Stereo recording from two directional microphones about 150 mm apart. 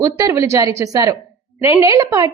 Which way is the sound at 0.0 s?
20° right (ahead or behind).